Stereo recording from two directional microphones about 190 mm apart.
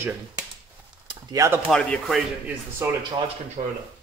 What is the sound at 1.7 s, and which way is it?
Speech, 5° left (ahead or behind).